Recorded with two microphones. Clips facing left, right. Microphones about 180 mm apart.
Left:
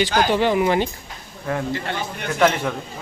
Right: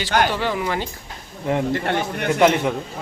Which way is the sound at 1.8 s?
65° right (ahead or behind).